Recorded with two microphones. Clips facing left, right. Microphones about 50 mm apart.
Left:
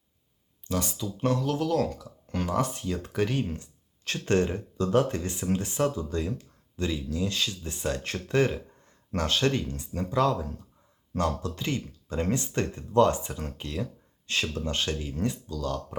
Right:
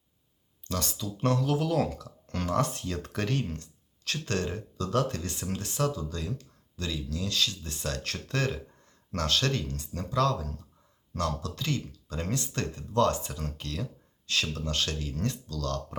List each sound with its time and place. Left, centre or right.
0.6 s speech: centre
2.0 s speech: centre
4.0 s speech: left